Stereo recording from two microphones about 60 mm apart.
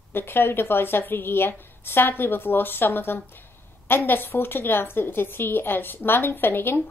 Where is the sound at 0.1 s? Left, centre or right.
Left.